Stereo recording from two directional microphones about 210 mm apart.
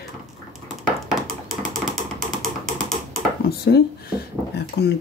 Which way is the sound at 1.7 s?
Centre (ahead or behind).